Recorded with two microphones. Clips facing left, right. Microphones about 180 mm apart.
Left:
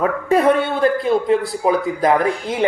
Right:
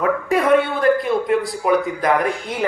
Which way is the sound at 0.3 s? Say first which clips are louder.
Left 2 dB; 30° left (ahead or behind).